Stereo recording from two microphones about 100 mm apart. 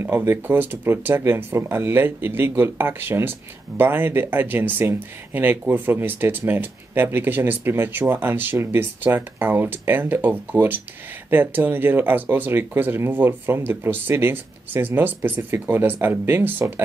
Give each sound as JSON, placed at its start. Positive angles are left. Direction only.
{"t": 0.0, "sound": "speech", "side_deg": -25}